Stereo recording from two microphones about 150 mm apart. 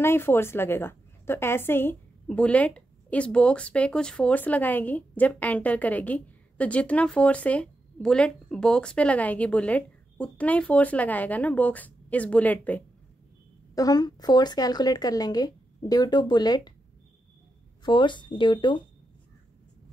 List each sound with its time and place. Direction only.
0.0 s a woman's voice: 15° left (ahead or behind)
13.7 s speech: 25° left (ahead or behind)
17.8 s speech: 30° left (ahead or behind)